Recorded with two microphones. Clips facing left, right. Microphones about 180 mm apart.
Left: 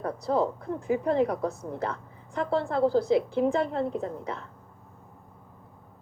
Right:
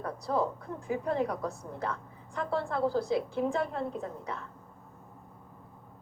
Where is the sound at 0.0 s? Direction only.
20° left (ahead or behind).